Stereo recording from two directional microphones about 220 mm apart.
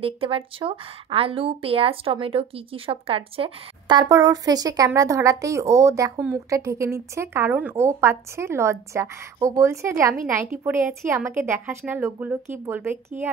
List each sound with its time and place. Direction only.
0.0 s a woman's voice: 25° right (ahead or behind)